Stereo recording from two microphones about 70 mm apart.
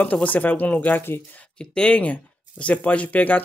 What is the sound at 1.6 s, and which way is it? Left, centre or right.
Speech, centre.